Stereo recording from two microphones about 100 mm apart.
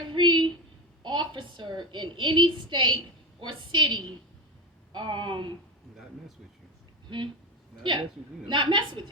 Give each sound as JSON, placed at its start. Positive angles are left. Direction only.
{"t": 0.1, "sound": "a sound", "side_deg": -50}
{"t": 1.0, "sound": "a woman's voice", "side_deg": -50}
{"t": 7.9, "sound": "a woman's voice", "side_deg": -50}